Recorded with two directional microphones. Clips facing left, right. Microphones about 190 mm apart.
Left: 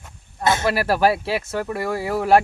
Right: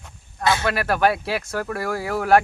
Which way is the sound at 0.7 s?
30° left (ahead or behind).